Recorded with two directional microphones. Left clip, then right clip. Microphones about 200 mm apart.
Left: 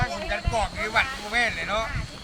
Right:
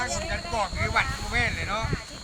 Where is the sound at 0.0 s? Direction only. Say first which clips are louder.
Left 2 dB; 50° left (ahead or behind).